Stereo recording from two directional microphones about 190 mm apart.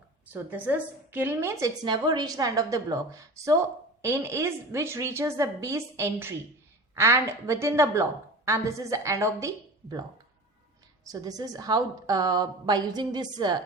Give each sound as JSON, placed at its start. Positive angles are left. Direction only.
{"t": 0.3, "sound": "a woman's voice", "side_deg": -10}
{"t": 11.0, "sound": "a woman's voice", "side_deg": -20}